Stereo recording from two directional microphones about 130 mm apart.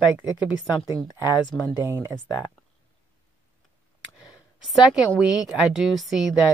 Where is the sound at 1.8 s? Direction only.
20° right (ahead or behind).